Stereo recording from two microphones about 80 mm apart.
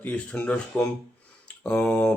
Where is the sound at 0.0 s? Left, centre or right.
Centre.